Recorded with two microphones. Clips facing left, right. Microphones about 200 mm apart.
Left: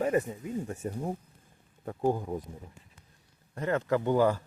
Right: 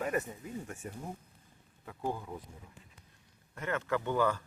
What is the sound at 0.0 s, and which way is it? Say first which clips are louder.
Speech: left 6 dB; 25° left (ahead or behind).